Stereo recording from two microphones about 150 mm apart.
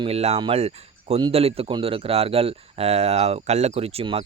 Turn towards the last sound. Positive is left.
turn(degrees=-40)  # may be behind; listen again after turning